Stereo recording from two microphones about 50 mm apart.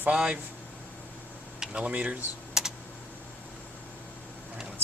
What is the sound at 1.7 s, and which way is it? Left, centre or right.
Speech, right.